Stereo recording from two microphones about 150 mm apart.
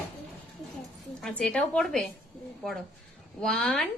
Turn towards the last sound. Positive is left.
turn(degrees=5)  # may be behind; listen again after turning